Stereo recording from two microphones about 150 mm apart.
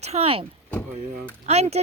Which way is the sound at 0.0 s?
45° right (ahead or behind).